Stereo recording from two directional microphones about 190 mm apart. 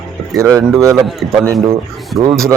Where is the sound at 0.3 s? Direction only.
15° right (ahead or behind).